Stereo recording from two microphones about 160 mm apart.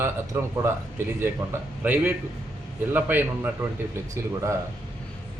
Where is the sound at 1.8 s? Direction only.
10° right (ahead or behind).